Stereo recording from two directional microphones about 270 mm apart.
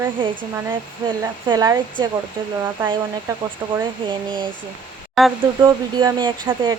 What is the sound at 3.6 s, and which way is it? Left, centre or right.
Speech, centre.